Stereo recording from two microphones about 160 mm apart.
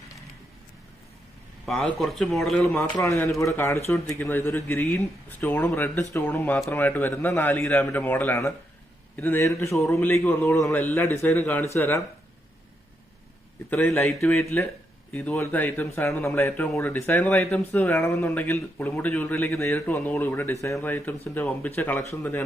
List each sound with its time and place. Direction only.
1.6 s speech: 5° left (ahead or behind)
3.0 s speech: 20° left (ahead or behind)
13.7 s a man's voice: 5° left (ahead or behind)